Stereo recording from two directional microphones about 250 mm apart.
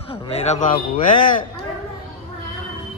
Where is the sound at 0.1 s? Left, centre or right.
Left.